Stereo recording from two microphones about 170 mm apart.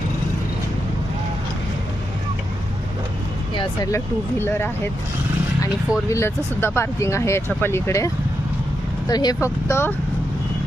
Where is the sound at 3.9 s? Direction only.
15° left (ahead or behind).